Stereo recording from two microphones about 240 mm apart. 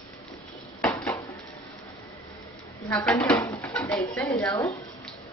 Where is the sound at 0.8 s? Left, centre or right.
Centre.